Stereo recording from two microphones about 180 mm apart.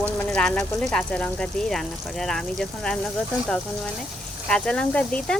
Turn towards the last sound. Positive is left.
turn(degrees=5)  # may be behind; listen again after turning